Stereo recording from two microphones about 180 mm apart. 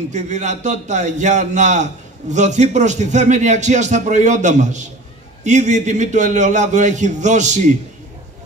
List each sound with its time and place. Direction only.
0.1 s a man's voice: 40° right (ahead or behind)